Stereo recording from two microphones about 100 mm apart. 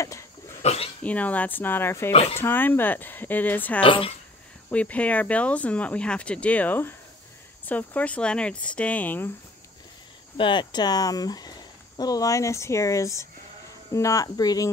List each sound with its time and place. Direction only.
0.0 s a sound: 30° left (ahead or behind)
0.6 s speech: 90° left
1.0 s speech: 15° left (ahead or behind)
2.1 s speech: 90° left
2.4 s speech: 20° left (ahead or behind)
3.8 s speech: 60° left (ahead or behind)
4.6 s speech: 15° left (ahead or behind)
10.3 s speech: 55° left (ahead or behind)